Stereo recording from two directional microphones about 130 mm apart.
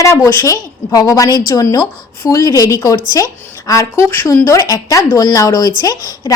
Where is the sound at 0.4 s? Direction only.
25° left (ahead or behind).